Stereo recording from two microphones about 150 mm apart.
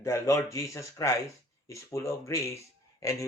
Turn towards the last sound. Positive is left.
turn(degrees=20)  # may be behind; listen again after turning